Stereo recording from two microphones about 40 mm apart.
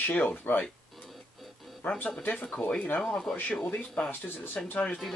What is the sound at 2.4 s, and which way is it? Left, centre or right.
Speech, left.